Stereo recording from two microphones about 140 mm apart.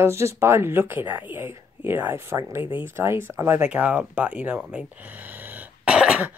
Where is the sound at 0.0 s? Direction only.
20° right (ahead or behind).